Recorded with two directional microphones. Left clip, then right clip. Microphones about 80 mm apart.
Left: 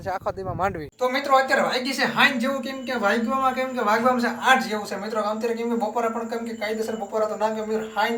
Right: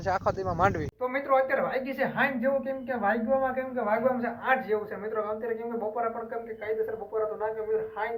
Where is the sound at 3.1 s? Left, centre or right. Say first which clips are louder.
Left 2 dB; left.